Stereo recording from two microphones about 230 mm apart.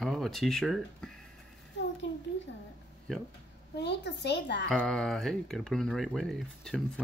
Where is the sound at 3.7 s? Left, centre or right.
Left.